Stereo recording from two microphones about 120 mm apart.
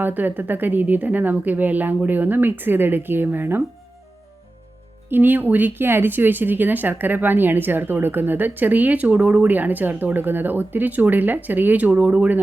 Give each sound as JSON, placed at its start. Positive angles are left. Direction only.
{"t": 0.0, "sound": "speech", "side_deg": -15}
{"t": 5.0, "sound": "speech", "side_deg": -15}